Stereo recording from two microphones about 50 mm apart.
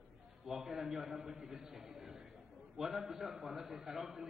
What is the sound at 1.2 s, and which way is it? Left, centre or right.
Speech, centre.